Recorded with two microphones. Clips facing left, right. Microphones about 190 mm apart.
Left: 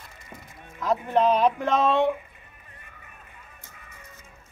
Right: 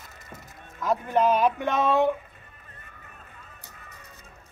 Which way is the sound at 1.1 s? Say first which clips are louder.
Left 1 dB; centre (ahead or behind).